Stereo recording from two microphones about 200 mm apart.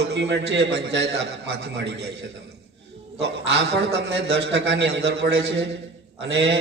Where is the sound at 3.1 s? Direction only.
60° right (ahead or behind).